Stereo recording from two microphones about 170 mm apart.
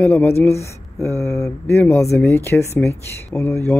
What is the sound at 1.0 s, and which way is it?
A woman's voice, centre (ahead or behind).